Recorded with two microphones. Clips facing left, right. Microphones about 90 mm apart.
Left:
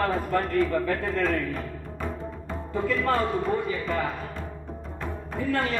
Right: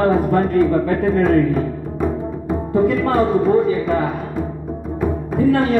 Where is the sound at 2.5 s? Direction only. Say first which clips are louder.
Right 11 dB; 20° right (ahead or behind).